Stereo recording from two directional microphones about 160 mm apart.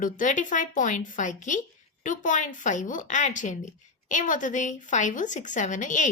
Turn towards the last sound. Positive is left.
turn(degrees=50)  # may be behind; listen again after turning